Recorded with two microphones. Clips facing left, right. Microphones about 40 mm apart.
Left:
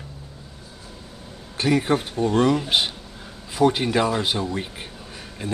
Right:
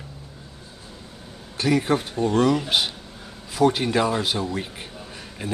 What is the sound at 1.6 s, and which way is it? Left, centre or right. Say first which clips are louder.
Speech: left 1 dB; centre.